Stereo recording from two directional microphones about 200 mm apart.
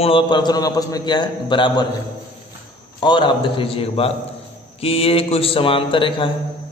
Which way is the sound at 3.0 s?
20° left (ahead or behind).